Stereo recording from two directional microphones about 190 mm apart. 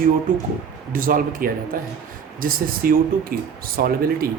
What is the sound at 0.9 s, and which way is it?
Speech, 50° right (ahead or behind).